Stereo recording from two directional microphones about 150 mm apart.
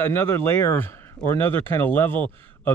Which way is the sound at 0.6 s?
15° left (ahead or behind).